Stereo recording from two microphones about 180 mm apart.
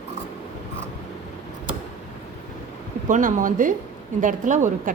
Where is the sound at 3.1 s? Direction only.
45° right (ahead or behind).